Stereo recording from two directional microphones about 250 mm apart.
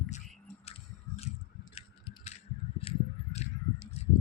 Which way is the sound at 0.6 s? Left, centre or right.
Left.